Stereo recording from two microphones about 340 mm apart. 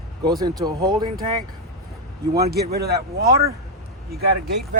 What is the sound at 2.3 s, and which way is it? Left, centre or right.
Speech, right.